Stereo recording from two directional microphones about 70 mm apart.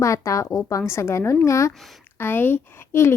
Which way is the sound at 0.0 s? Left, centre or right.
Left.